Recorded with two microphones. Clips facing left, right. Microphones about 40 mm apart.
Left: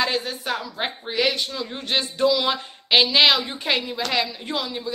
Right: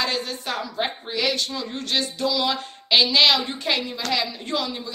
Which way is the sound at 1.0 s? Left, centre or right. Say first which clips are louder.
Left 5 dB; centre.